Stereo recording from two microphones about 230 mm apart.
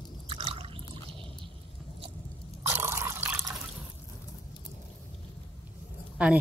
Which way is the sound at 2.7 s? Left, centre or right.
Centre.